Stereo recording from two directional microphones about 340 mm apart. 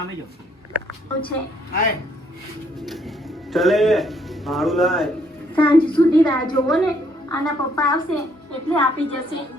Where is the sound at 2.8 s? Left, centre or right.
Centre.